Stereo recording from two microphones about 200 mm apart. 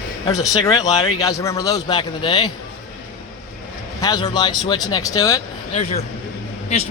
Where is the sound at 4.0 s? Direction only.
20° left (ahead or behind).